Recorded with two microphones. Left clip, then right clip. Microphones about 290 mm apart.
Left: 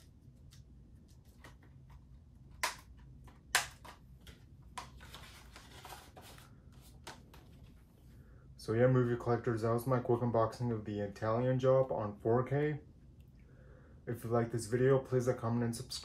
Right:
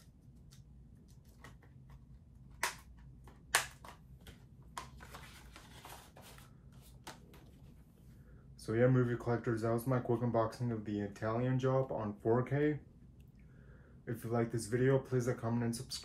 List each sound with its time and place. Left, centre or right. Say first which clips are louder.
5.2 s printer: left 1 dB; centre
8.6 s speech: left 1 dB; centre
14.0 s speech: left 2 dB; centre